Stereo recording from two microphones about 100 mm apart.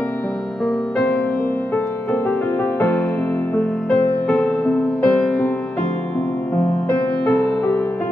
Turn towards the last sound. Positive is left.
turn(degrees=15)  # may be behind; listen again after turning